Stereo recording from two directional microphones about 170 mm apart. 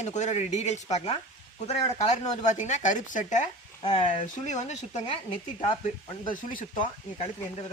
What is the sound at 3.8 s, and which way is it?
Speech, 30° left (ahead or behind).